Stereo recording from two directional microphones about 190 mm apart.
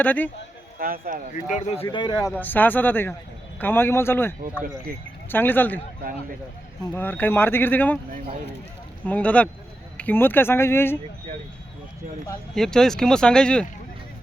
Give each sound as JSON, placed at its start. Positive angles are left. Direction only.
{"t": 0.0, "sound": "speech", "side_deg": 10}
{"t": 0.8, "sound": "speech", "side_deg": -50}
{"t": 1.3, "sound": "a man's voice", "side_deg": 40}
{"t": 2.4, "sound": "speech", "side_deg": 10}
{"t": 6.8, "sound": "speech", "side_deg": 10}
{"t": 9.0, "sound": "speech", "side_deg": 5}
{"t": 12.5, "sound": "speech", "side_deg": 0}